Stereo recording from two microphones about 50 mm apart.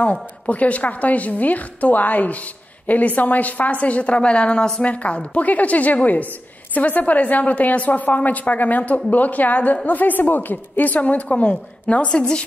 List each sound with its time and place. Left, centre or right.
0.0 s a woman's voice: left
4.9 s a woman's voice: left